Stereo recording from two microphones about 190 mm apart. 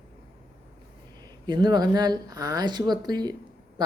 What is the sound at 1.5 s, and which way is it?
Speech, 20° right (ahead or behind).